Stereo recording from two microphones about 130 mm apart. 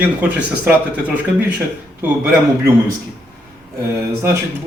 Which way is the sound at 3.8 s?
20° right (ahead or behind).